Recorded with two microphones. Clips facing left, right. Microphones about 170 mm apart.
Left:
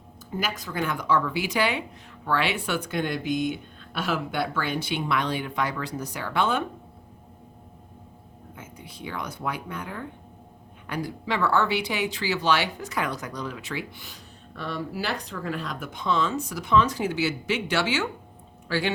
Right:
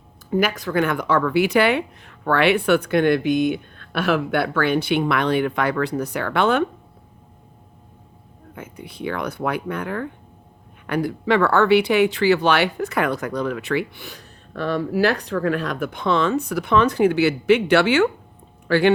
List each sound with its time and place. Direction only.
0.3 s speech: 65° right (ahead or behind)
8.5 s speech: 60° right (ahead or behind)